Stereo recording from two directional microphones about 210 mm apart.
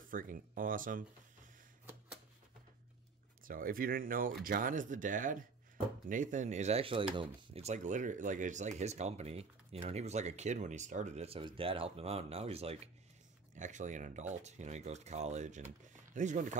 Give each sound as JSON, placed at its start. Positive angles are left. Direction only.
{"t": 0.1, "sound": "speech", "side_deg": -40}
{"t": 3.4, "sound": "speech", "side_deg": -40}